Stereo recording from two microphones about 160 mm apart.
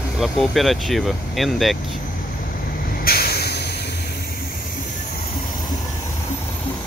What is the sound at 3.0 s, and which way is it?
Vehicle, 70° left (ahead or behind).